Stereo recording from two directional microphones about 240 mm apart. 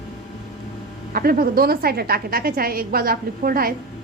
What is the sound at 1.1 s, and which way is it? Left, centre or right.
A woman's voice, right.